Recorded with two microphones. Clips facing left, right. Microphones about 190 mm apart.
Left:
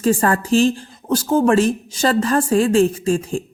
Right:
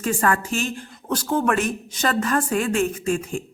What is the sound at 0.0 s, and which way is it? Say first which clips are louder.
A woman's voice: left 5 dB; 30° left (ahead or behind).